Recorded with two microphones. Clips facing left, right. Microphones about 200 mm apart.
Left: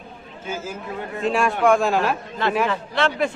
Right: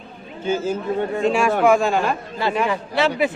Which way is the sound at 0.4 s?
30° right (ahead or behind).